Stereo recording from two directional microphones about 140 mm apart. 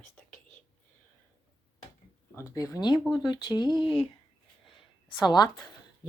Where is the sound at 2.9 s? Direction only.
5° right (ahead or behind).